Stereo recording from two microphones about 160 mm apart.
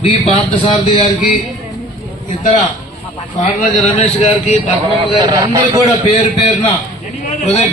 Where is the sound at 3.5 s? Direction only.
40° left (ahead or behind).